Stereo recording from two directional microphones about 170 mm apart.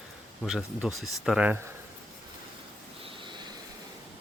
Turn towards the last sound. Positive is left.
turn(degrees=-30)  # may be behind; listen again after turning